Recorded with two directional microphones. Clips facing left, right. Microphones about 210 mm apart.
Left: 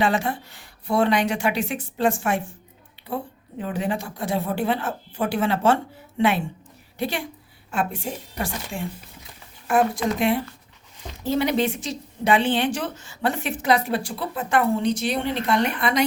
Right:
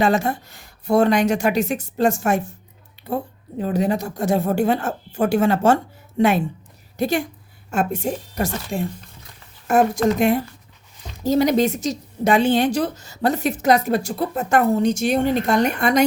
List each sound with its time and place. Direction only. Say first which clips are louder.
0.0 s speech: right 4 dB; 45° right (ahead or behind)
3.6 s speech: right 6 dB; 40° right (ahead or behind)